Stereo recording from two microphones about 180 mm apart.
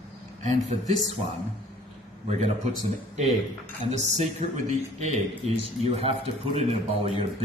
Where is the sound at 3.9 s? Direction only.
40° right (ahead or behind).